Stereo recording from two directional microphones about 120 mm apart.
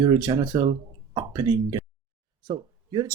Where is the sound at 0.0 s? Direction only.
35° right (ahead or behind).